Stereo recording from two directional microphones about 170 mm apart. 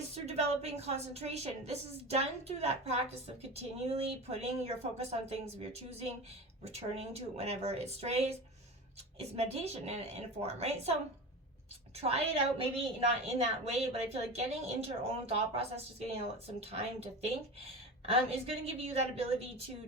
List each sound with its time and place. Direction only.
0.1 s a woman's voice: 40° right (ahead or behind)
6.7 s a woman's voice: 40° right (ahead or behind)
11.9 s a woman's voice: 35° right (ahead or behind)